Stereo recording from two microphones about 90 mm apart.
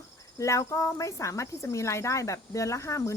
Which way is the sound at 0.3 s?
35° left (ahead or behind).